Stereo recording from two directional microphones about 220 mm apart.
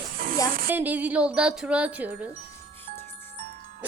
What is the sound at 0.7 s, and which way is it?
Speech, 10° right (ahead or behind).